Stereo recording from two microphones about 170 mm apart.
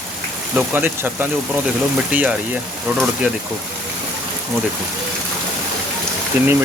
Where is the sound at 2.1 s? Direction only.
10° right (ahead or behind).